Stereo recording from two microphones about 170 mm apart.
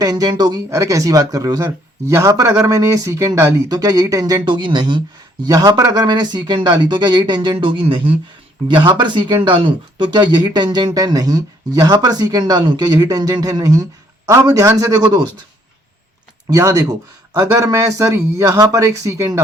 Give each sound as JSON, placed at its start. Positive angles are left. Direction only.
{"t": 0.0, "sound": "speech", "side_deg": -20}
{"t": 16.5, "sound": "speech", "side_deg": -20}